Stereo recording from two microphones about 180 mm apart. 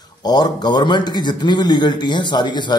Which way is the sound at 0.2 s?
25° left (ahead or behind).